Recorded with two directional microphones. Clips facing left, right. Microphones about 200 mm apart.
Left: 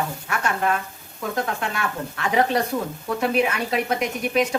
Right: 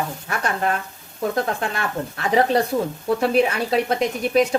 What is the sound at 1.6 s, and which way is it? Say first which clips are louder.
A woman's voice: right 2 dB; 35° right (ahead or behind).